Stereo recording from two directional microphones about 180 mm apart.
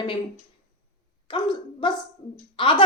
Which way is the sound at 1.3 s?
25° left (ahead or behind).